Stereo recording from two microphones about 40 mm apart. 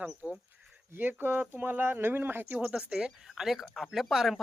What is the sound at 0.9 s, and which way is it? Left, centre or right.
Speech, right.